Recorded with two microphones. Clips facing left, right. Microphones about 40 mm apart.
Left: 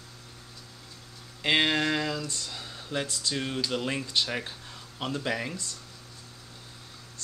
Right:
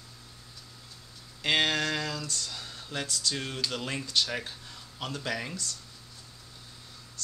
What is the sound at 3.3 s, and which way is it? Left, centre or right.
Speech, centre.